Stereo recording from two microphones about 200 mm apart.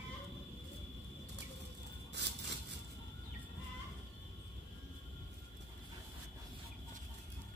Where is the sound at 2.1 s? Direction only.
60° right (ahead or behind).